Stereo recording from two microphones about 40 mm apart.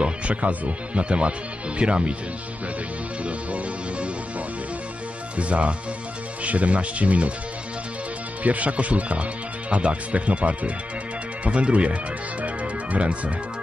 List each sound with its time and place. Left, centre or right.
0.0 s speech: right
3.3 s music: right
5.3 s speech: right
8.5 s speech: right